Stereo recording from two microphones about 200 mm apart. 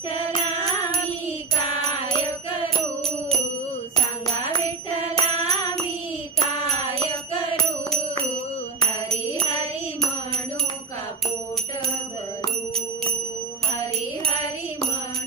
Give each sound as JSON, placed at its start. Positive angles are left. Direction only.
{"t": 5.2, "sound": "music", "side_deg": -30}